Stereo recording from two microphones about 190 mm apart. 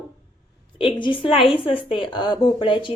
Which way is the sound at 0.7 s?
25° left (ahead or behind).